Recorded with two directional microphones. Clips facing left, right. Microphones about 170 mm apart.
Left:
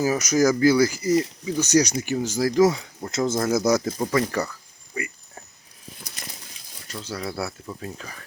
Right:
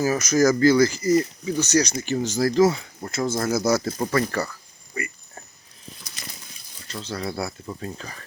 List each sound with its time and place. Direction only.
0.0 s speech: 15° left (ahead or behind)
4.9 s a sound: 15° left (ahead or behind)
6.8 s speech: 10° left (ahead or behind)